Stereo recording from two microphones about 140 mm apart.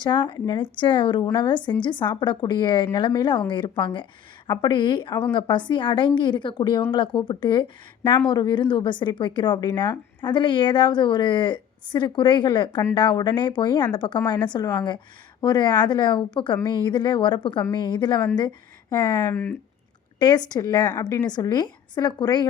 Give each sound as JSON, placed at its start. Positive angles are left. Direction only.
{"t": 0.0, "sound": "speech", "side_deg": 35}
{"t": 19.3, "sound": "speech", "side_deg": 15}
{"t": 20.1, "sound": "a woman's voice", "side_deg": 30}